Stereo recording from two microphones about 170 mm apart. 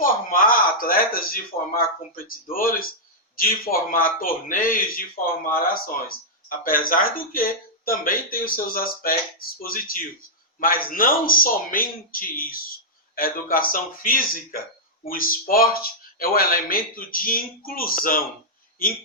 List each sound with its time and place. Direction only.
0.0 s speech: 55° left (ahead or behind)